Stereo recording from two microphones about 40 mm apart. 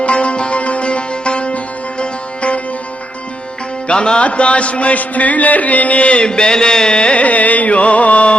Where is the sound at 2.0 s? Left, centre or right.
Left.